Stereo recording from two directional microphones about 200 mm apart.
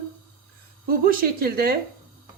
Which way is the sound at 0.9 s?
50° right (ahead or behind).